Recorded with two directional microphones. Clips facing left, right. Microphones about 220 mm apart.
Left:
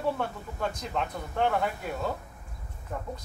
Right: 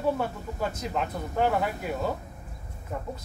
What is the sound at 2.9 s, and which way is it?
Speech, 5° right (ahead or behind).